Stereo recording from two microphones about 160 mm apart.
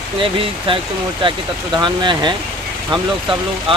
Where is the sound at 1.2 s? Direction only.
30° right (ahead or behind).